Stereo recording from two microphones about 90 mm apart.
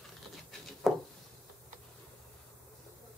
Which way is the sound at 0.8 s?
Centre (ahead or behind).